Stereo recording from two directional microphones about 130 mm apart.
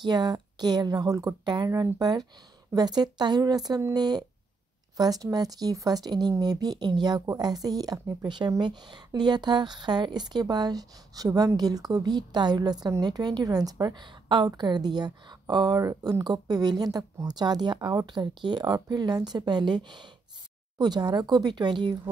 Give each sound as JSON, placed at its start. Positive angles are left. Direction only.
{"t": 0.0, "sound": "speech", "side_deg": -30}